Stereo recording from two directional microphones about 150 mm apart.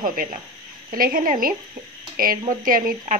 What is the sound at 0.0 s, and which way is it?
Speech, 70° right (ahead or behind).